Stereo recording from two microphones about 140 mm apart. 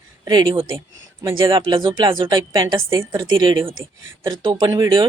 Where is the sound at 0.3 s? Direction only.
35° right (ahead or behind).